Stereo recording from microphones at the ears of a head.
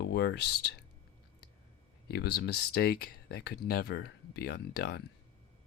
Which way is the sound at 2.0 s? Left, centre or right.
Left.